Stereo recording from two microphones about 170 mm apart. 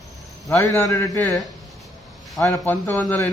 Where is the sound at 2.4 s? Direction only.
10° left (ahead or behind).